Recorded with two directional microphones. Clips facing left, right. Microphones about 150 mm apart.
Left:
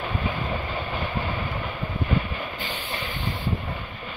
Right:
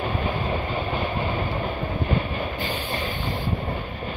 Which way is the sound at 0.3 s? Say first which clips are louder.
Right 3 dB; 30° right (ahead or behind).